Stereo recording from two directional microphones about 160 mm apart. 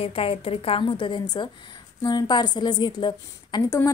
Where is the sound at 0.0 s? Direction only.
35° left (ahead or behind).